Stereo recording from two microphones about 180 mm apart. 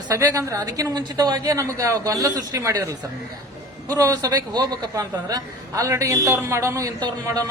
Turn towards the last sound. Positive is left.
turn(degrees=-20)  # may be behind; listen again after turning